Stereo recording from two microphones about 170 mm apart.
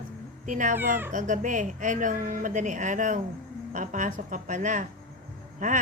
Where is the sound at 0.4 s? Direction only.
50° right (ahead or behind).